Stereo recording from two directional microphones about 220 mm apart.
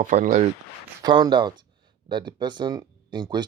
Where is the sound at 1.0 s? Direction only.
20° right (ahead or behind).